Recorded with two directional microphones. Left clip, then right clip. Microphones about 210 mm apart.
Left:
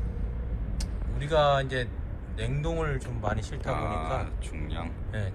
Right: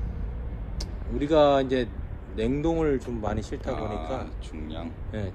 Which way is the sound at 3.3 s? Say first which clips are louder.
Left 2 dB; 30° left (ahead or behind).